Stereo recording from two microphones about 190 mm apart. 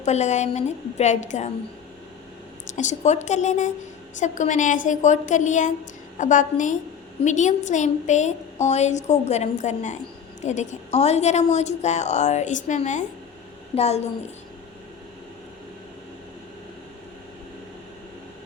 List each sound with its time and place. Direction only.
0.0 s a woman's voice: 35° left (ahead or behind)
2.7 s a woman's voice: 40° left (ahead or behind)